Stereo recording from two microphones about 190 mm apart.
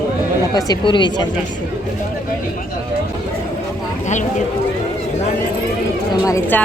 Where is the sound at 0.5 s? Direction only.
25° left (ahead or behind).